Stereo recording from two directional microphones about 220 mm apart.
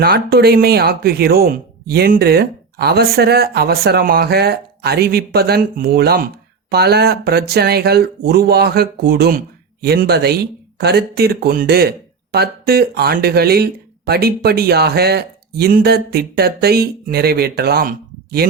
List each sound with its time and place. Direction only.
0.0 s speech: 45° right (ahead or behind)